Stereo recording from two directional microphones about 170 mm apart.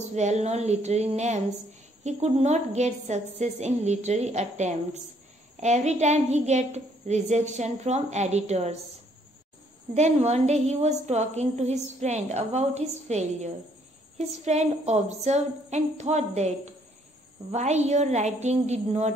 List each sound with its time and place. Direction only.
0.1 s a woman's voice: 40° right (ahead or behind)
9.9 s a woman's voice: 40° right (ahead or behind)